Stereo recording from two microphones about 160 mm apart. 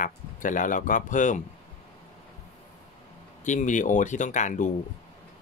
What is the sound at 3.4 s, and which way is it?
Speech, 50° left (ahead or behind).